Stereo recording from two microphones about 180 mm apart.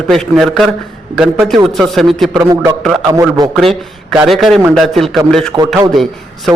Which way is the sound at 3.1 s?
20° right (ahead or behind).